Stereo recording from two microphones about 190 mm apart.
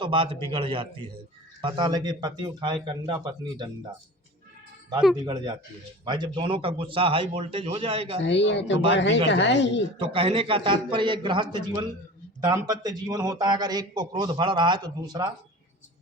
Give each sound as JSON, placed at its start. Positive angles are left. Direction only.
{"t": 0.0, "sound": "a man's voice", "side_deg": -25}
{"t": 5.2, "sound": "a man's voice", "side_deg": -25}
{"t": 8.2, "sound": "speech", "side_deg": 70}
{"t": 10.0, "sound": "a man's voice", "side_deg": -25}